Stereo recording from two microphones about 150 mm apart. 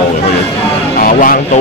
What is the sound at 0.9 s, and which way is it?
Music, 70° left (ahead or behind).